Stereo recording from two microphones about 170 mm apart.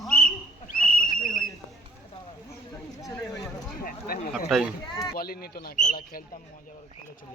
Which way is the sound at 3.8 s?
55° left (ahead or behind).